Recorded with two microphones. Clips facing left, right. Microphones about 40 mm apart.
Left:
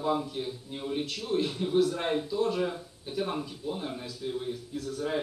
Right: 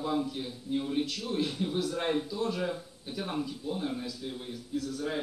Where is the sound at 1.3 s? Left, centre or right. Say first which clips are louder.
Left 6 dB; centre.